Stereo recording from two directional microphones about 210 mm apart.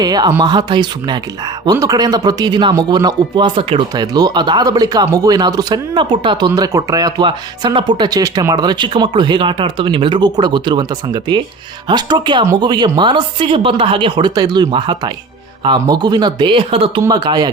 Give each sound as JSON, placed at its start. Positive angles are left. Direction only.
{"t": 0.0, "sound": "speech", "side_deg": -20}